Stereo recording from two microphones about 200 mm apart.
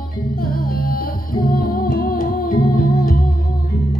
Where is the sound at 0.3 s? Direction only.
45° left (ahead or behind).